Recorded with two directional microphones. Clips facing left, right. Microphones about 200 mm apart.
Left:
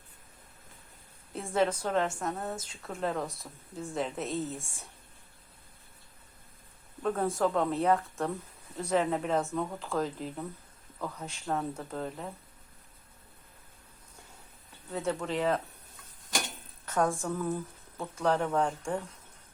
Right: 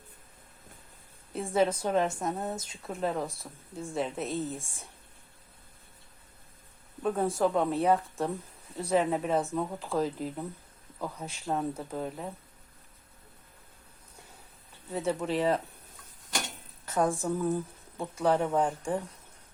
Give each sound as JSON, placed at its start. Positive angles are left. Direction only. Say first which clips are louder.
{"t": 1.3, "sound": "a woman's voice", "louder": "right 2 dB", "side_deg": -5}
{"t": 2.9, "sound": "speech", "louder": "right 1 dB", "side_deg": -5}
{"t": 7.0, "sound": "speech", "louder": "right 1 dB", "side_deg": -10}
{"t": 14.8, "sound": "speech", "louder": "right 2 dB", "side_deg": -15}
{"t": 16.8, "sound": "a woman's voice", "louder": "right 1 dB", "side_deg": -15}